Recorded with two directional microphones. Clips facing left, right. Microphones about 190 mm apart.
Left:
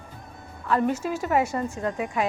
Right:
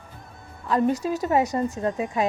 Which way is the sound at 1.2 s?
35° right (ahead or behind).